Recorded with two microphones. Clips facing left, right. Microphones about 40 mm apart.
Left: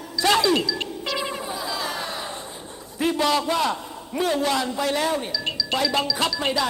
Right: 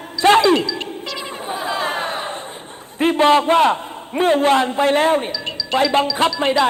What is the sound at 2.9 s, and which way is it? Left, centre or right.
A man's voice, right.